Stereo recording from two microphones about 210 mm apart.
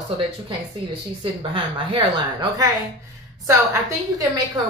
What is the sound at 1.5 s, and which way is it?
A woman's voice, 25° right (ahead or behind).